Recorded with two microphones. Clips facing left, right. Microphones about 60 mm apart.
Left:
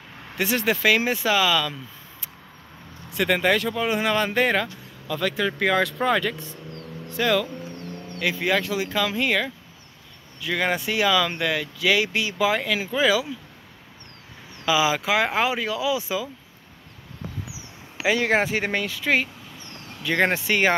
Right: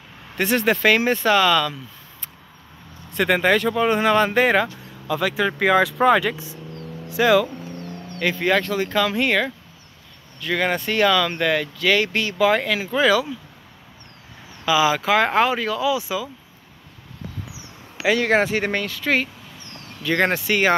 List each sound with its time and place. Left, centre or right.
0.4 s speech: centre
3.4 s speech: centre
5.9 s speech: right
6.2 s speech: centre
7.1 s speech: centre
7.4 s vehicle: right
8.1 s speech: centre
10.4 s speech: centre
14.7 s speech: centre
15.9 s speech: left
18.0 s speech: centre
20.3 s speech: left